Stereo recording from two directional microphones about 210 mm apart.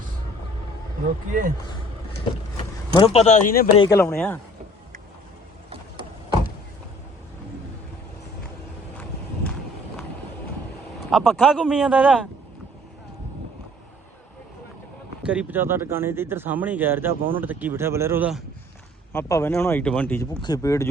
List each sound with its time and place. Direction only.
1.3 s speech: 40° right (ahead or behind)
2.9 s speech: 30° left (ahead or behind)
3.8 s speech: 15° left (ahead or behind)
11.1 s speech: centre (ahead or behind)
15.2 s speech: 5° right (ahead or behind)
19.1 s speech: 15° left (ahead or behind)